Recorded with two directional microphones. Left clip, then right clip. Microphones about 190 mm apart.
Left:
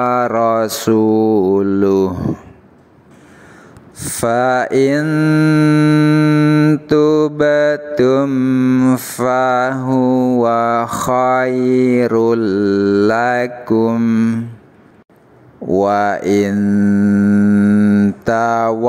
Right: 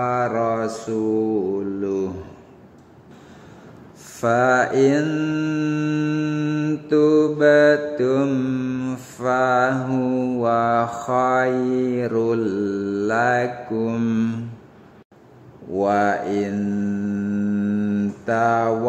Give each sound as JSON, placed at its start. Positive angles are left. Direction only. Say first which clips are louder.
{"t": 0.0, "sound": "mantra", "louder": "left 7 dB", "side_deg": 45}
{"t": 4.0, "sound": "mantra", "louder": "left 4 dB", "side_deg": 40}
{"t": 6.9, "sound": "mantra", "louder": "left 1 dB", "side_deg": 40}
{"t": 8.3, "sound": "mantra", "louder": "left 9 dB", "side_deg": 30}
{"t": 8.9, "sound": "mantra", "louder": "left 7 dB", "side_deg": 40}
{"t": 13.9, "sound": "mantra", "louder": "left 7 dB", "side_deg": 25}
{"t": 15.7, "sound": "mantra", "louder": "left 5 dB", "side_deg": 40}